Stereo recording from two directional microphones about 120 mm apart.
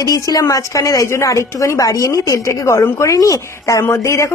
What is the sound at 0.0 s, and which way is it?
Speech, 30° left (ahead or behind).